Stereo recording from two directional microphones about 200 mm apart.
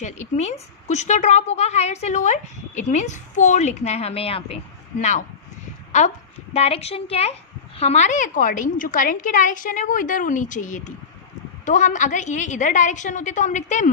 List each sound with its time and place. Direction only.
0.0 s a woman's voice: 35° left (ahead or behind)
6.5 s a woman's voice: 30° left (ahead or behind)